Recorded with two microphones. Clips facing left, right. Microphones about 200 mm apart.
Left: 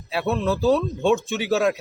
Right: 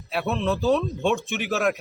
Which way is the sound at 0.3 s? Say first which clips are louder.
Left 2 dB; centre (ahead or behind).